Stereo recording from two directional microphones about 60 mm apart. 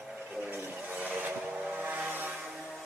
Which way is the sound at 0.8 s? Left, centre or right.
Right.